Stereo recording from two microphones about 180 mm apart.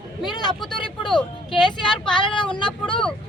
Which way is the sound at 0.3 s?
25° left (ahead or behind).